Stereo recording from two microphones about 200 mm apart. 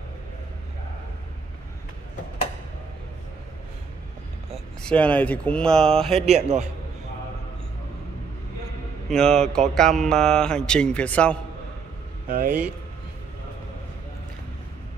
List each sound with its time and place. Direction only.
4.5 s speech: 5° left (ahead or behind)
6.2 s a man's voice: 35° right (ahead or behind)
9.1 s speech: 5° left (ahead or behind)
12.3 s speech: 50° right (ahead or behind)